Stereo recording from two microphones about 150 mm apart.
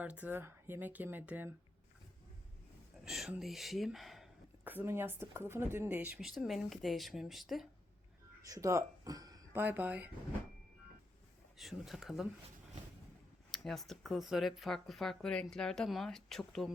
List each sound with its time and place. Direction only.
0.0 s speech: 10° right (ahead or behind)
3.0 s speech: 5° right (ahead or behind)
4.6 s speech: 10° right (ahead or behind)
8.4 s a sound: 20° right (ahead or behind)
9.6 s speech: 10° right (ahead or behind)
11.5 s speech: centre (ahead or behind)
13.5 s speech: centre (ahead or behind)